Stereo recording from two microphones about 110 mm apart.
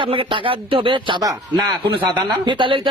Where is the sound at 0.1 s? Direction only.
55° right (ahead or behind).